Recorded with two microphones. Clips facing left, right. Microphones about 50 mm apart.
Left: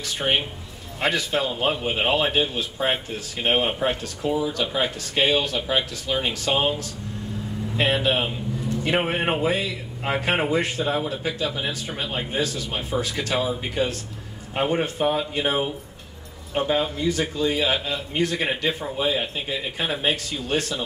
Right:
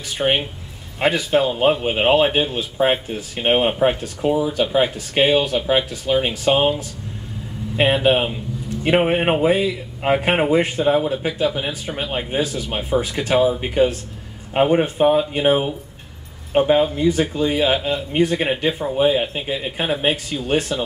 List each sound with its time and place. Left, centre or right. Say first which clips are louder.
0.0 s a man's voice: right 4 dB; right